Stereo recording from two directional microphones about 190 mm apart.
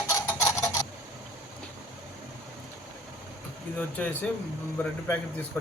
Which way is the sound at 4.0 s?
10° left (ahead or behind).